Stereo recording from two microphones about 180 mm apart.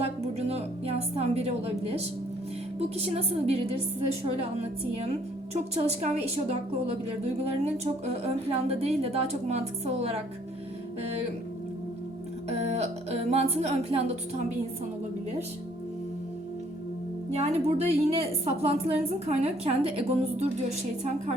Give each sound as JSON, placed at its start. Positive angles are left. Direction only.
{"t": 0.0, "sound": "music", "side_deg": -35}
{"t": 2.7, "sound": "a woman's voice", "side_deg": -35}
{"t": 5.5, "sound": "a woman's voice", "side_deg": -35}
{"t": 12.5, "sound": "a woman's voice", "side_deg": -35}
{"t": 17.3, "sound": "a woman's voice", "side_deg": -35}